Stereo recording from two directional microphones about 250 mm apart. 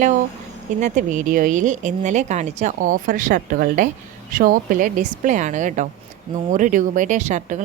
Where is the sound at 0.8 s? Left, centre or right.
Right.